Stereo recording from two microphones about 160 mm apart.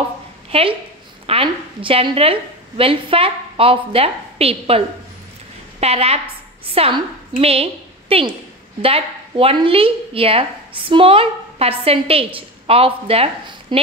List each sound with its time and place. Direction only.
0.5 s a woman's voice: 35° right (ahead or behind)